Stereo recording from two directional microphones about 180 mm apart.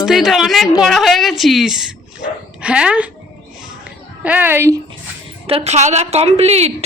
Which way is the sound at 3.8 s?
5° right (ahead or behind).